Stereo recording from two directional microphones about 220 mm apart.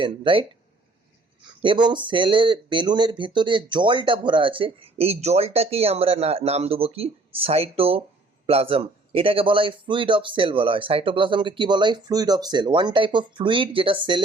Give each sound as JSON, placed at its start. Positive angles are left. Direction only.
{"t": 0.0, "sound": "speech", "side_deg": -25}
{"t": 1.6, "sound": "speech", "side_deg": -20}